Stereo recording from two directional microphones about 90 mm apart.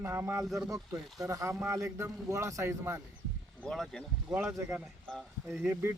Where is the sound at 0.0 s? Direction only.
25° right (ahead or behind).